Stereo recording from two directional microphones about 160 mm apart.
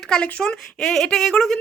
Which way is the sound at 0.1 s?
5° left (ahead or behind).